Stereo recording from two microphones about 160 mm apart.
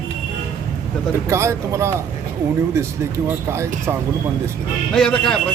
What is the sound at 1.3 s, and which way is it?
Speech, 15° right (ahead or behind).